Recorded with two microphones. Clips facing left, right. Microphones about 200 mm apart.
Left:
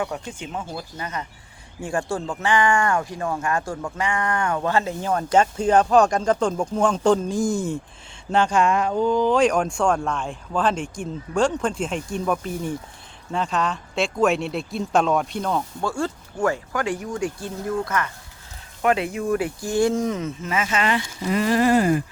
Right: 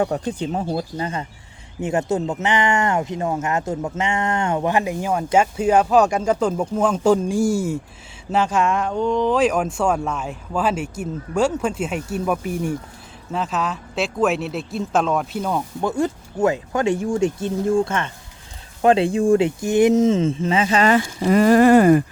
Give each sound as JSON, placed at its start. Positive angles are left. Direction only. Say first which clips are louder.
{"t": 0.0, "sound": "speech", "louder": "right 7 dB", "side_deg": -35}
{"t": 15.8, "sound": "speech", "louder": "right 4 dB", "side_deg": -20}